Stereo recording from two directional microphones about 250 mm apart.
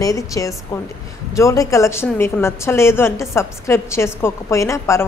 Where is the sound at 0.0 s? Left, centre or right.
Centre.